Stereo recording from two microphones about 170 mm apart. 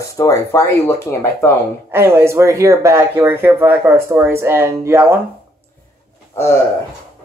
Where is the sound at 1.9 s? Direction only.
15° right (ahead or behind).